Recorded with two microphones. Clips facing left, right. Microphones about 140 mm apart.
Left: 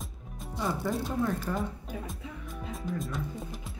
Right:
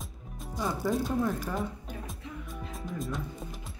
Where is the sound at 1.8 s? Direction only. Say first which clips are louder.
Left 2 dB; centre (ahead or behind).